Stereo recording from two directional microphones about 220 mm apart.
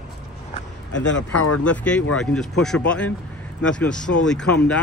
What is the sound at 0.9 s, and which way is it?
Speech, 55° left (ahead or behind).